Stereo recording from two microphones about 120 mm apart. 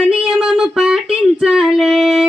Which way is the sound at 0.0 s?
5° right (ahead or behind).